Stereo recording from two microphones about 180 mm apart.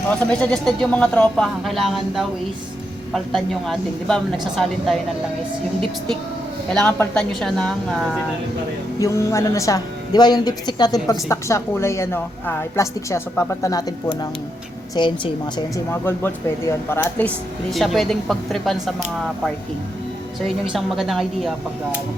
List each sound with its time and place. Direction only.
0.1 s speech: 5° left (ahead or behind)
6.7 s speech: 5° left (ahead or behind)
9.0 s speech: 15° left (ahead or behind)
14.9 s a woman's voice: 25° left (ahead or behind)
15.9 s speech: 15° left (ahead or behind)
20.7 s speech: centre (ahead or behind)